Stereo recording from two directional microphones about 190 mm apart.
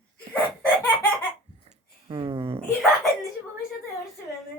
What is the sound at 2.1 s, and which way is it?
Speech, 25° right (ahead or behind).